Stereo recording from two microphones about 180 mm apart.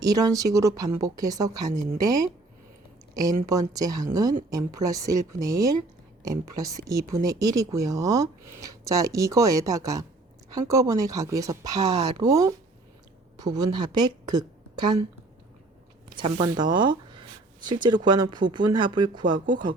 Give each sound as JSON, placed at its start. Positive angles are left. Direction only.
{"t": 0.0, "sound": "a woman's voice", "side_deg": -20}
{"t": 16.0, "sound": "speech", "side_deg": -25}